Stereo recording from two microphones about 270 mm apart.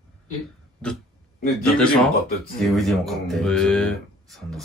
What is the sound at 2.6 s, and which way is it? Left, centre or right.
A man's voice, centre.